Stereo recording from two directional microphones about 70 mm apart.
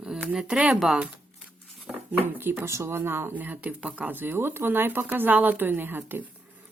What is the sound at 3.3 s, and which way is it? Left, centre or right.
Speech, right.